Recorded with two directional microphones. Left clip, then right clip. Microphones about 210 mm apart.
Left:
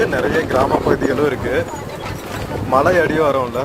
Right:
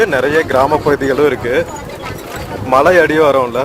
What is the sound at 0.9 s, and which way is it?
Speech, 25° right (ahead or behind).